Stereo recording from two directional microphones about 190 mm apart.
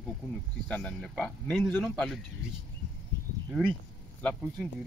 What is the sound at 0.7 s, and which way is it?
Speech, 5° left (ahead or behind).